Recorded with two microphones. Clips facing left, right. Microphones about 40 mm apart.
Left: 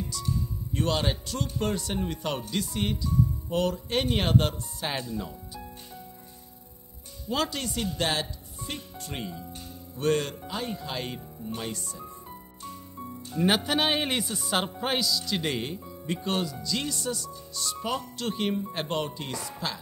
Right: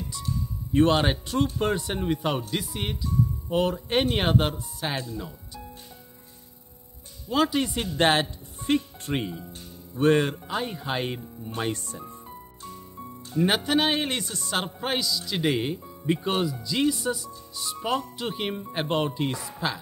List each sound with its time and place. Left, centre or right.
0.1 s music: right
0.7 s speech: right
4.6 s speech: centre
7.4 s speech: right
11.5 s speech: right
12.3 s speech: centre